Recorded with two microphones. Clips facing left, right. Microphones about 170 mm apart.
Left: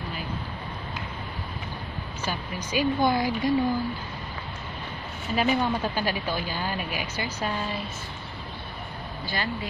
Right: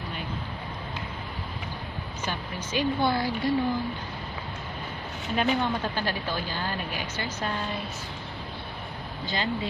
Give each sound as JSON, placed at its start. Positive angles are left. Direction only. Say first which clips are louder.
{"t": 2.2, "sound": "a woman's voice", "louder": "left 2 dB", "side_deg": 10}
{"t": 5.3, "sound": "a woman's voice", "louder": "left 2 dB", "side_deg": 5}
{"t": 9.2, "sound": "speech", "louder": "right 1 dB", "side_deg": -20}